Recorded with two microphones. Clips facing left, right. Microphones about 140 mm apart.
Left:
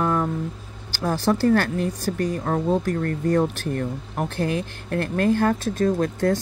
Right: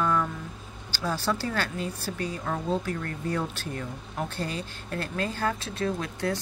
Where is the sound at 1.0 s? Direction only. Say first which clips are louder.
Left 8 dB; 50° left (ahead or behind).